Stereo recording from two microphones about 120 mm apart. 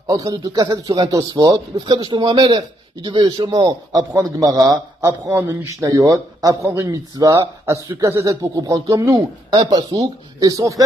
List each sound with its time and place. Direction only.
0.0 s speech: 30° right (ahead or behind)
9.1 s speech: 35° right (ahead or behind)